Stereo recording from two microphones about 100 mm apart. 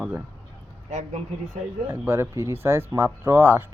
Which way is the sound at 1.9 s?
25° right (ahead or behind).